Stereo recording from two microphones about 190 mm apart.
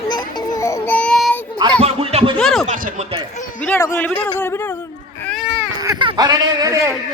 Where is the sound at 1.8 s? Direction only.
30° right (ahead or behind).